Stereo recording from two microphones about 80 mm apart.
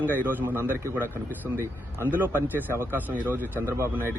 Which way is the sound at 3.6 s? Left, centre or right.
Right.